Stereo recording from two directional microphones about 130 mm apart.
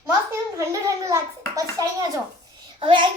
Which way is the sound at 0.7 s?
25° right (ahead or behind).